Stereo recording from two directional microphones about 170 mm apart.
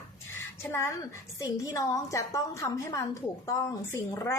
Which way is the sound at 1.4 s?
20° left (ahead or behind).